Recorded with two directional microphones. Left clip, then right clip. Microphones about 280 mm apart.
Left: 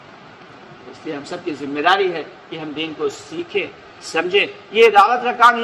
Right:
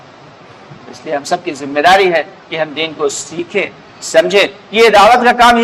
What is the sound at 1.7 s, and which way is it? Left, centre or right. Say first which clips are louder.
A man's voice: right 8 dB; right.